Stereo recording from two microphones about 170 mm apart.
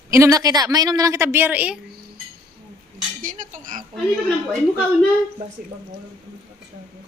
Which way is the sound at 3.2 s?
50° right (ahead or behind).